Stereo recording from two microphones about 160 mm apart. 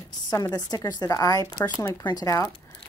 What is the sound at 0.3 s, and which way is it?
Speech, 25° left (ahead or behind).